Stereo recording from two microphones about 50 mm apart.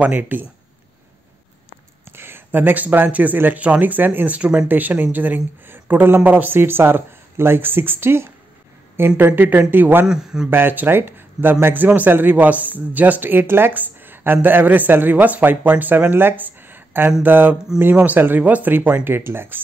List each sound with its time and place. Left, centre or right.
0.0 s speech: right
2.0 s speech: right
4.4 s speech: right
4.6 s speech: right
10.0 s a man's voice: centre
10.5 s speech: right